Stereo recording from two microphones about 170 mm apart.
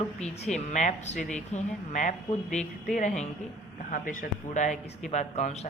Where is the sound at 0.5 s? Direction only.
45° left (ahead or behind).